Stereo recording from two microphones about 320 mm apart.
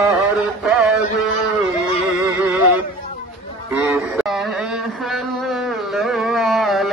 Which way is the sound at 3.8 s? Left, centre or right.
Centre.